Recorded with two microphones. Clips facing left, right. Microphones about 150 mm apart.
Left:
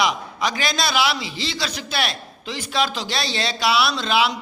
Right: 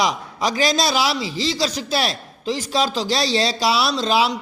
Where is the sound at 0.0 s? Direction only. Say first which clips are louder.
Right 1 dB; 35° right (ahead or behind).